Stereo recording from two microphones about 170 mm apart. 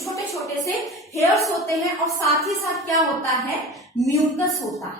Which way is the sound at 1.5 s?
Centre (ahead or behind).